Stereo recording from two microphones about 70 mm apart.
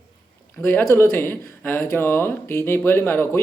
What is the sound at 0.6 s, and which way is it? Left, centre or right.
Speech, left.